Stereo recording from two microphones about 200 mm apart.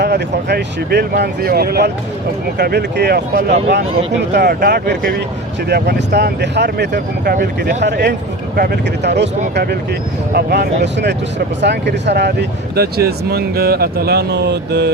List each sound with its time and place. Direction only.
0.0 s speech: 55° right (ahead or behind)
10.3 s speech: 55° right (ahead or behind)